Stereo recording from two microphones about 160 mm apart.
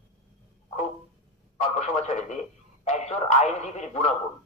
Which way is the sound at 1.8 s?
45° left (ahead or behind).